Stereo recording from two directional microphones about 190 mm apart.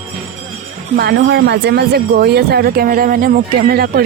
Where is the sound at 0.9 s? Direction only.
60° right (ahead or behind).